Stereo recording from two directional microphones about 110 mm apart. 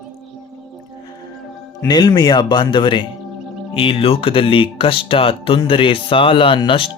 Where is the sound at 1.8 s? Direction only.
40° left (ahead or behind).